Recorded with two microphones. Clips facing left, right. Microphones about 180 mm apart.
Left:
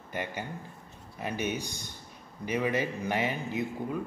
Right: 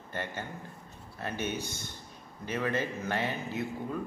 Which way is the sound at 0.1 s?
15° left (ahead or behind).